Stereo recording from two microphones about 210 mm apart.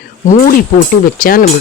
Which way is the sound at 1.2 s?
45° left (ahead or behind).